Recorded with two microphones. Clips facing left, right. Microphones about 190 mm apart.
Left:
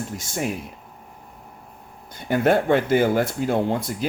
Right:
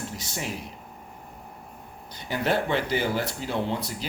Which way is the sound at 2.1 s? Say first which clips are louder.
Left 7 dB; 50° left (ahead or behind).